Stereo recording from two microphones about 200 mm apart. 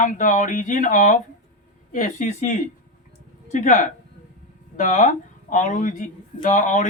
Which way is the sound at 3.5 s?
40° left (ahead or behind).